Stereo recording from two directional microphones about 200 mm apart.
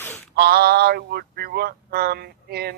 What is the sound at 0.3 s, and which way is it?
A man's voice, 50° right (ahead or behind).